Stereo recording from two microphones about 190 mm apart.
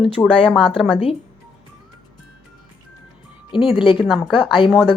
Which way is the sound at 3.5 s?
25° left (ahead or behind).